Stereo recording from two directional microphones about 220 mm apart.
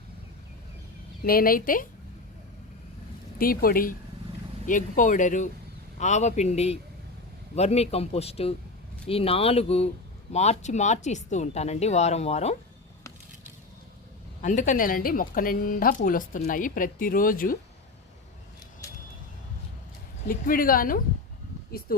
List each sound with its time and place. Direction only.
1.2 s speech: 40° left (ahead or behind)
3.3 s speech: 40° left (ahead or behind)
14.4 s speech: 35° left (ahead or behind)
20.2 s speech: 40° left (ahead or behind)